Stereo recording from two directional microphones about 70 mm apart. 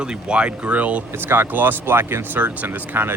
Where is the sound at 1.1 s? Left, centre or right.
Right.